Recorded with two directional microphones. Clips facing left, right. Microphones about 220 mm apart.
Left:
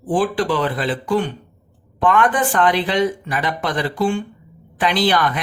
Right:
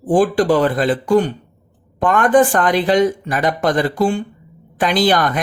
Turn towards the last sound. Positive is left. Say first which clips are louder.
# right 3 dB
turn(degrees=-45)  # may be behind; listen again after turning